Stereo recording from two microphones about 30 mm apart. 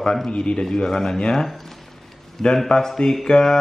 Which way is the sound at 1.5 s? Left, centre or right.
Centre.